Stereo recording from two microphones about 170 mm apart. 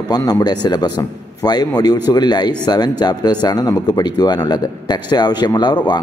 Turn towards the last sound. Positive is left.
turn(degrees=25)  # may be behind; listen again after turning